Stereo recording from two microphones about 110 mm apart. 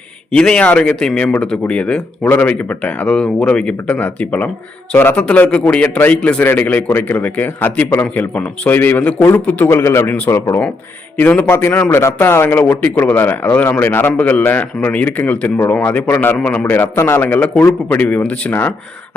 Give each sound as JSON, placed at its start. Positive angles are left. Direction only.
{"t": 0.3, "sound": "a man's voice", "side_deg": 5}